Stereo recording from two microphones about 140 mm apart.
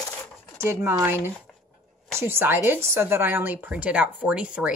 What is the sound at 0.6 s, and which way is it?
Speech, 20° right (ahead or behind).